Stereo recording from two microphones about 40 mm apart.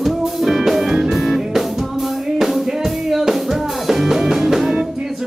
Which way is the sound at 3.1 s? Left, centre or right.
Centre.